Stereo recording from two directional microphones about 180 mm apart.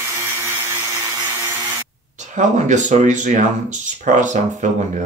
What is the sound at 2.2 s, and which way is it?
Speech, 40° right (ahead or behind).